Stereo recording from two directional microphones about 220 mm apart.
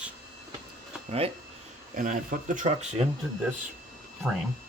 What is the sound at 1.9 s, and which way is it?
Speech, 40° right (ahead or behind).